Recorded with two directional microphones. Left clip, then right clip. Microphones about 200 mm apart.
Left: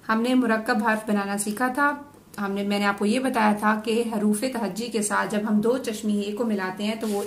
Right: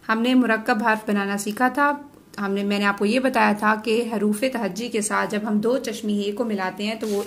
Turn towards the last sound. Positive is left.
turn(degrees=-35)  # may be behind; listen again after turning